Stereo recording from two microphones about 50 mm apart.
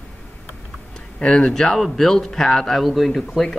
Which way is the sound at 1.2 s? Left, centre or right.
Centre.